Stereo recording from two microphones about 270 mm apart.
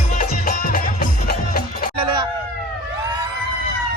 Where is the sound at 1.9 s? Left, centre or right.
Centre.